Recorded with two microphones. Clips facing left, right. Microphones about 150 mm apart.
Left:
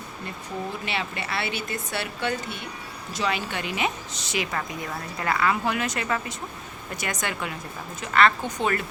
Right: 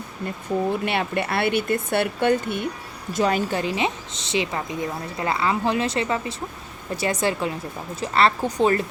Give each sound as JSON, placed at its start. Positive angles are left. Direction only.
{"t": 0.7, "sound": "a woman's voice", "side_deg": -55}